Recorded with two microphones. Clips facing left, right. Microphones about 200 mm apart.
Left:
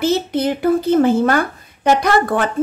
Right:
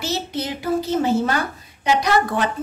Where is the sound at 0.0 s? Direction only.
55° left (ahead or behind).